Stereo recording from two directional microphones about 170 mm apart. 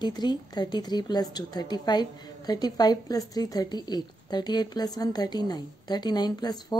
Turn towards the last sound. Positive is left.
turn(degrees=25)  # may be behind; listen again after turning